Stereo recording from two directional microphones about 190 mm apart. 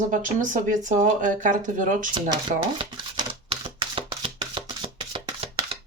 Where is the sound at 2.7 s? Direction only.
25° right (ahead or behind).